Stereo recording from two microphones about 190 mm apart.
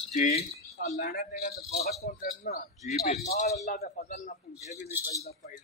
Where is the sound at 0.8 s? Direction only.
50° left (ahead or behind).